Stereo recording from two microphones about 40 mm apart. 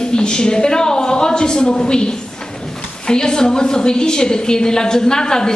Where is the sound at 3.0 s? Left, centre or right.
Centre.